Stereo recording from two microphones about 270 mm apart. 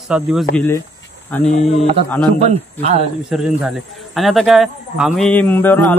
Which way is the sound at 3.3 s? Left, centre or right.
Centre.